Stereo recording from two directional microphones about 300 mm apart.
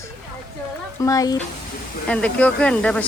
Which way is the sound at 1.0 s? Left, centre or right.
Centre.